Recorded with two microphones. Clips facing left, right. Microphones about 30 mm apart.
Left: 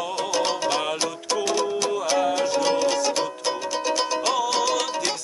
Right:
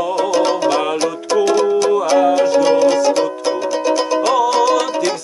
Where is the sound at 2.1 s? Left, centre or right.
Centre.